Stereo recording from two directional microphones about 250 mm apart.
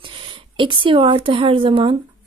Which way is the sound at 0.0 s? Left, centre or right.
Centre.